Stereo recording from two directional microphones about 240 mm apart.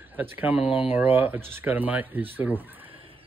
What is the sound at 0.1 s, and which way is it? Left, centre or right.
Speech, centre.